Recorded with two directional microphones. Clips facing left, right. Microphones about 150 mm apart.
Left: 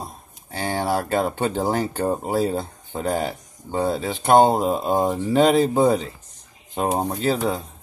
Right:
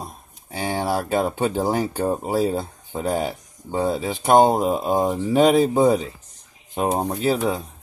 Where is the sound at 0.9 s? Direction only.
10° right (ahead or behind).